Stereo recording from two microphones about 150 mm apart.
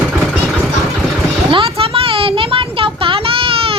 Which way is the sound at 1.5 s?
35° right (ahead or behind).